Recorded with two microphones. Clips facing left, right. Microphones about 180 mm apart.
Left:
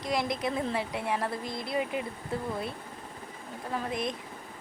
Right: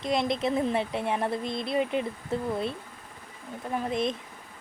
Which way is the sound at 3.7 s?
25° right (ahead or behind).